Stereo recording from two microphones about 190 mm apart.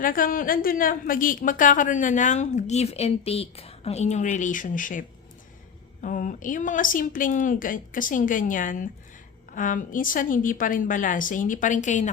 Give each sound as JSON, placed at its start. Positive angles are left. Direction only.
{"t": 0.0, "sound": "a woman's voice", "side_deg": 45}